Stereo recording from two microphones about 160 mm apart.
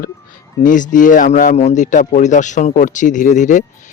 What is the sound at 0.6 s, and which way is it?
Speech, 55° left (ahead or behind).